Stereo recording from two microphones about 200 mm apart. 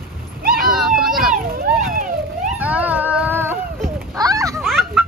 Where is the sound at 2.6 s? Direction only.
5° right (ahead or behind).